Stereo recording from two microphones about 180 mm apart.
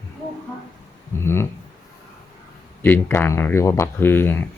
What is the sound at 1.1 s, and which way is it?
Speech, 15° left (ahead or behind).